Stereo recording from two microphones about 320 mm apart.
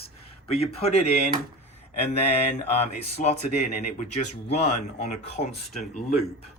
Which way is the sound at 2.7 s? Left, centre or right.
Left.